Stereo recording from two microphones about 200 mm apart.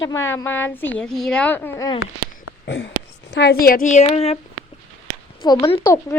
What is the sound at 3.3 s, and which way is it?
A woman's voice, 55° left (ahead or behind).